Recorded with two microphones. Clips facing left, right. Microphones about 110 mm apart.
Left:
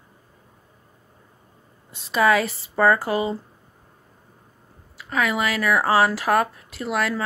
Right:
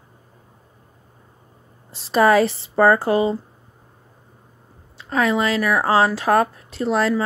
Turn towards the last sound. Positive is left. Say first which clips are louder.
# right 5 dB
turn(degrees=-25)  # may be behind; listen again after turning